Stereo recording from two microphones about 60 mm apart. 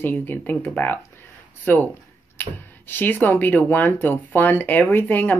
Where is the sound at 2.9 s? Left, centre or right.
Left.